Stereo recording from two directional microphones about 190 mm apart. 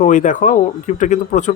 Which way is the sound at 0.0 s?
40° left (ahead or behind).